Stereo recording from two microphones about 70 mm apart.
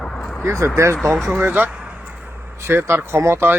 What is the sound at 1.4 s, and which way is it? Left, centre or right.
Speech, right.